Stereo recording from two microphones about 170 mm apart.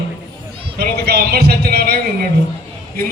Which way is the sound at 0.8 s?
65° right (ahead or behind).